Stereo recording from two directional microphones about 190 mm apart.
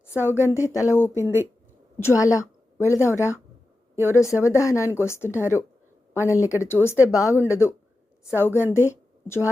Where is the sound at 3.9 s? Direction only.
10° right (ahead or behind).